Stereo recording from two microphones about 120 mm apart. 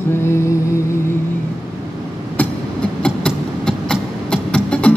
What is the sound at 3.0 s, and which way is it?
Music, 5° left (ahead or behind).